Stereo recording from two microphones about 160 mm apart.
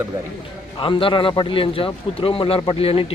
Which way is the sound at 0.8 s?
35° left (ahead or behind).